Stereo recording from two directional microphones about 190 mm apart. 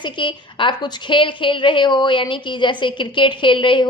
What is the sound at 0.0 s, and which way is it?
A woman's voice, 25° left (ahead or behind).